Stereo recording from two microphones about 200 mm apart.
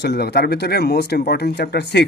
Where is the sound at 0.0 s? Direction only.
55° left (ahead or behind).